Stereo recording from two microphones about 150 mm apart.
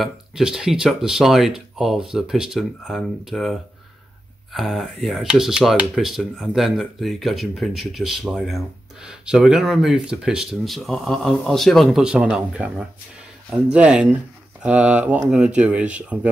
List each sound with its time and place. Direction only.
0.0 s speech: 5° right (ahead or behind)